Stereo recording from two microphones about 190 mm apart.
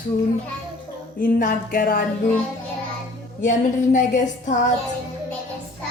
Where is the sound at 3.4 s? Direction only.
40° left (ahead or behind).